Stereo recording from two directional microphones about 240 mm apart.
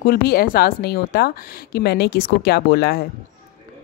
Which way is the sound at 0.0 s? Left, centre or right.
Left.